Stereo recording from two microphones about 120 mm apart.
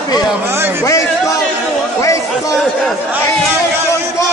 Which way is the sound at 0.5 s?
20° right (ahead or behind).